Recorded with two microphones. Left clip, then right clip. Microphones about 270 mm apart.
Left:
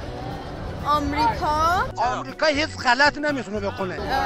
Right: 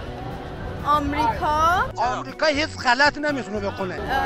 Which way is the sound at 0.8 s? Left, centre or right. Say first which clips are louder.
Even; centre.